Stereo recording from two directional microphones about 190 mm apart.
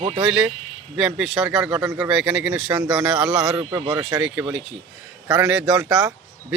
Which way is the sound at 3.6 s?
15° right (ahead or behind).